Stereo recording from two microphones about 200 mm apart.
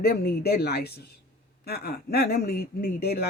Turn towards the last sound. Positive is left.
turn(degrees=50)  # may be behind; listen again after turning